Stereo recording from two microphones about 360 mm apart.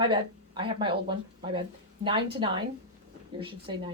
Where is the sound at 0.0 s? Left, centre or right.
Centre.